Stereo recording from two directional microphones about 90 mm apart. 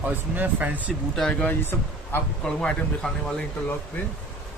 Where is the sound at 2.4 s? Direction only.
10° left (ahead or behind).